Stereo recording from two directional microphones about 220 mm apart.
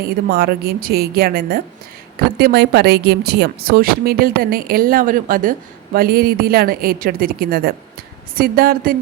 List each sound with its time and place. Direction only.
0.0 s a woman's voice: 45° right (ahead or behind)